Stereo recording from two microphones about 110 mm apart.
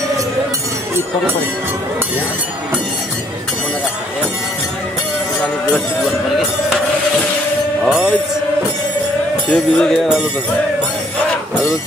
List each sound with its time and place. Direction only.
7.8 s music: 5° right (ahead or behind)
9.5 s speech: 10° left (ahead or behind)